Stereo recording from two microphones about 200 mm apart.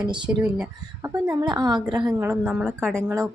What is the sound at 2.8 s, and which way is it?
Speech, 5° left (ahead or behind).